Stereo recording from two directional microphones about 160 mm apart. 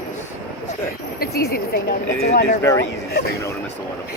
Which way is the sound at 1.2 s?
85° left.